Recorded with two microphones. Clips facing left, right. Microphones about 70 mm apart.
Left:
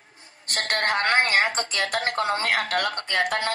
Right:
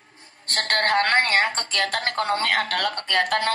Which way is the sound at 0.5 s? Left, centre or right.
Right.